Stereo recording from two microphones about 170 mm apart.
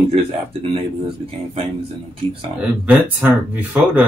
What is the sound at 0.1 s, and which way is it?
Speech, 35° right (ahead or behind).